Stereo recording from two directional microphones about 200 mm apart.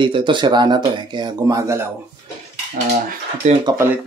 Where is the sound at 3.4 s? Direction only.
40° right (ahead or behind).